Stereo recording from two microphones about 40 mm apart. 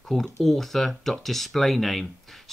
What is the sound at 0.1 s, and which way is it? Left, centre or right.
Speech, centre.